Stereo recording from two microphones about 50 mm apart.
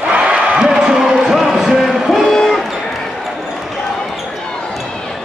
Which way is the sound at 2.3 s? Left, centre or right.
Centre.